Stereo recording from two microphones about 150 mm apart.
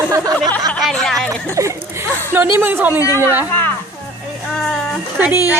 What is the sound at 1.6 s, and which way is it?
A woman's voice, 20° right (ahead or behind).